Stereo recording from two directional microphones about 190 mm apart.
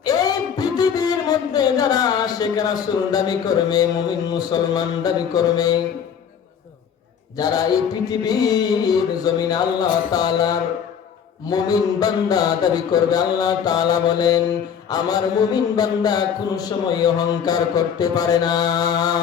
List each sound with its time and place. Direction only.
0.0 s speech: 20° left (ahead or behind)
7.3 s a man's voice: 20° left (ahead or behind)